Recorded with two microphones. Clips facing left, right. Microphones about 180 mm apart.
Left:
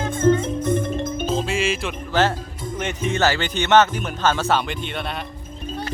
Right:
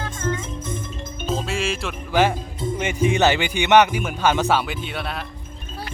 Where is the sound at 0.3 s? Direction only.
65° left (ahead or behind).